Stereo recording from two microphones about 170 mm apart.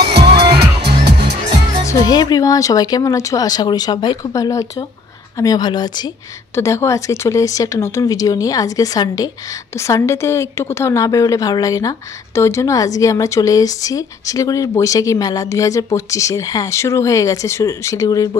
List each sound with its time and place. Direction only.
0.1 s music: 70° right (ahead or behind)
1.9 s a woman's voice: 25° left (ahead or behind)